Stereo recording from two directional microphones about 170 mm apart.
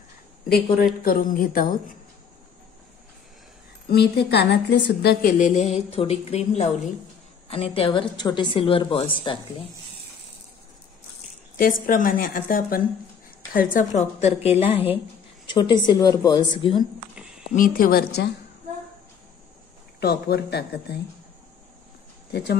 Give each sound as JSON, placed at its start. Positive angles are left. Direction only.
{"t": 1.0, "sound": "a woman's voice", "side_deg": 55}
{"t": 3.9, "sound": "a woman's voice", "side_deg": 75}
{"t": 5.2, "sound": "a woman's voice", "side_deg": 45}
{"t": 11.5, "sound": "a woman's voice", "side_deg": 55}
{"t": 15.5, "sound": "a woman's voice", "side_deg": 25}
{"t": 17.1, "sound": "a sound", "side_deg": -5}
{"t": 17.5, "sound": "a woman's voice", "side_deg": 55}
{"t": 20.0, "sound": "a woman's voice", "side_deg": 70}